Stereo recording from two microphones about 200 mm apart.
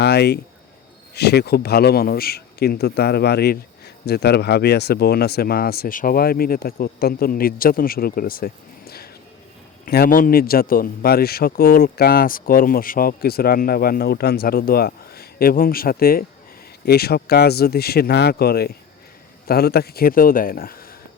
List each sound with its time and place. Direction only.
0.0 s a man's voice: 55° left (ahead or behind)